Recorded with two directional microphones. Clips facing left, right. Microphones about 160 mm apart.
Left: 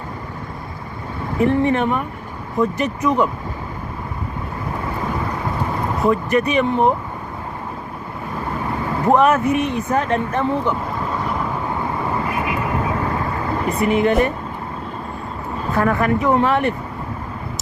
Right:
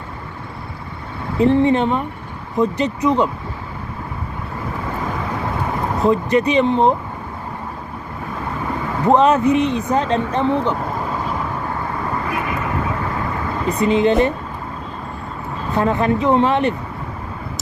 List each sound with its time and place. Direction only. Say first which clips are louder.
1.4 s speech: right 3 dB; 20° right (ahead or behind)
6.0 s speech: right 2 dB; 20° right (ahead or behind)
9.0 s speech: right 2 dB; 20° right (ahead or behind)
13.7 s speech: right 2 dB; 20° right (ahead or behind)
15.7 s speech: right 1 dB; 20° right (ahead or behind)